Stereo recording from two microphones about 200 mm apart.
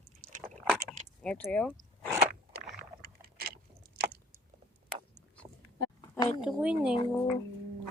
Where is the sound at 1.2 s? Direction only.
5° left (ahead or behind).